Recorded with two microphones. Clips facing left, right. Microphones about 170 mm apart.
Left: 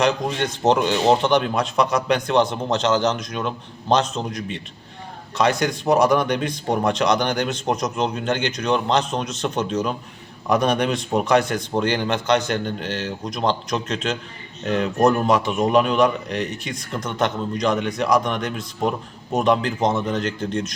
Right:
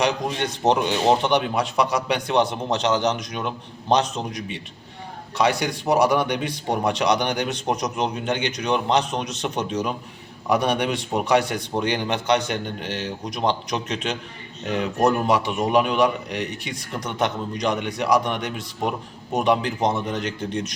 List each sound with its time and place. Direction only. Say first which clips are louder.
0.0 s speech: left 2 dB; 15° right (ahead or behind)